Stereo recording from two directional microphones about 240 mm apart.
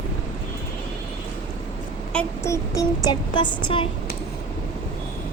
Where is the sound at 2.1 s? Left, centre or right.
Centre.